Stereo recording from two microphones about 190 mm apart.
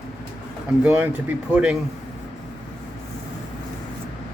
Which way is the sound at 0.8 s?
10° right (ahead or behind).